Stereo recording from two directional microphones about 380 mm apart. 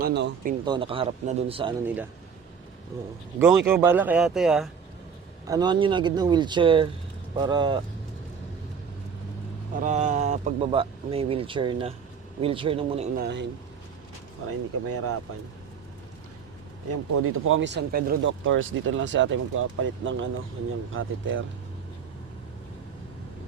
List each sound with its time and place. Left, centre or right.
0.0 s speech: right
0.6 s speech: centre
3.3 s speech: centre
9.7 s speech: centre
14.8 s speech: right
16.9 s speech: right